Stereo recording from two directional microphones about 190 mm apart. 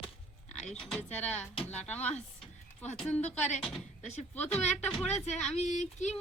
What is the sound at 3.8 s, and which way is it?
Speech, 35° left (ahead or behind).